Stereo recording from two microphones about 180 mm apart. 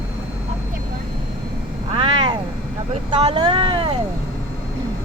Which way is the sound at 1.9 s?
30° right (ahead or behind).